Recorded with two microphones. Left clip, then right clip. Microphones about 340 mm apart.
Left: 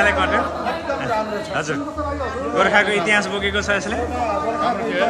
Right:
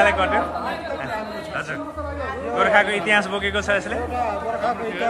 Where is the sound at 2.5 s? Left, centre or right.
Centre.